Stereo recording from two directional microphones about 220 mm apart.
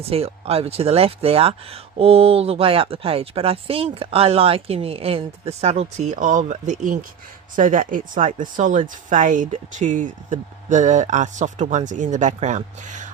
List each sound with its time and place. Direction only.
0.0 s speech: 25° right (ahead or behind)